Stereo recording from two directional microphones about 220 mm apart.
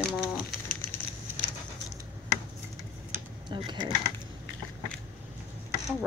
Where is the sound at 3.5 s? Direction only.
20° right (ahead or behind).